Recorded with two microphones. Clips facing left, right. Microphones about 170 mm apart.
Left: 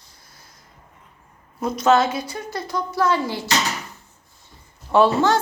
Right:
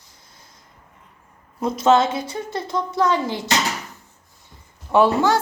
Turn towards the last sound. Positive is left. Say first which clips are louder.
# even
turn(degrees=-10)  # may be behind; listen again after turning